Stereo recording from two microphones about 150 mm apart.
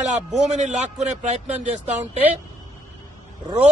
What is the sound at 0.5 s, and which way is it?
Speech, 50° right (ahead or behind).